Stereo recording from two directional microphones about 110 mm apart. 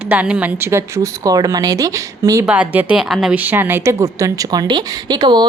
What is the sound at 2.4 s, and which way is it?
Speech, 10° right (ahead or behind).